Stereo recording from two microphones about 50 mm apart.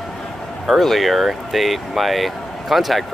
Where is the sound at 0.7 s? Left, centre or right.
Centre.